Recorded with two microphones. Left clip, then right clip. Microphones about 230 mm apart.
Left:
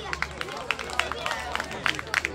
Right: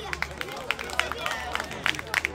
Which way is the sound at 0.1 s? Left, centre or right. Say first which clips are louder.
Left 1 dB; right.